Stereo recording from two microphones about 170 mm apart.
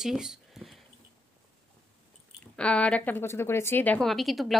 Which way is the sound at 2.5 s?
5° left (ahead or behind).